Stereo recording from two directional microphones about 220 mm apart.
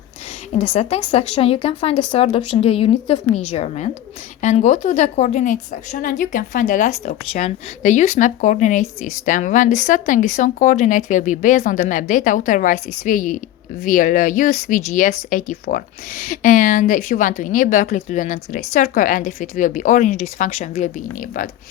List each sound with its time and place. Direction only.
0.5 s a woman's voice: 30° left (ahead or behind)